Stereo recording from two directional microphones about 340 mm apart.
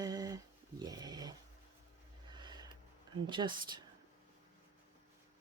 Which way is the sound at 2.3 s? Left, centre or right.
Centre.